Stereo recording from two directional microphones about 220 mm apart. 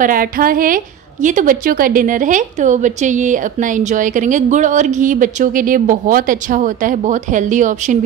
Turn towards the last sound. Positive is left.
turn(degrees=-35)  # may be behind; listen again after turning